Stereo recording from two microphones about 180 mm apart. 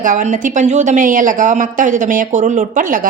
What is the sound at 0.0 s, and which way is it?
A woman's voice, 45° right (ahead or behind).